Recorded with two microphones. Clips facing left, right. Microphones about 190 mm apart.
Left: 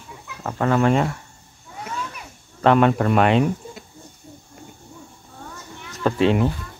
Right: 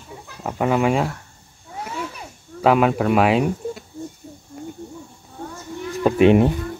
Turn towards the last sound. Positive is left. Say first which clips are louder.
# right 5 dB
turn(degrees=-20)  # may be behind; listen again after turning